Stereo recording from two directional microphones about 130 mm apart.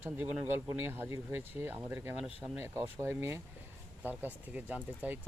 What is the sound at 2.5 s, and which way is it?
Speech, 20° right (ahead or behind).